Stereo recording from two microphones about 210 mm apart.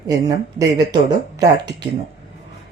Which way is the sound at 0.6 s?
15° right (ahead or behind).